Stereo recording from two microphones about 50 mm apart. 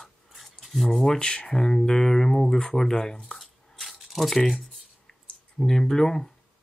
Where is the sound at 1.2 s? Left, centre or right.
Centre.